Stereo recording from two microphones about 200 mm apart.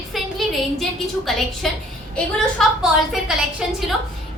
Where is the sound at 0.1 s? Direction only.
Centre (ahead or behind).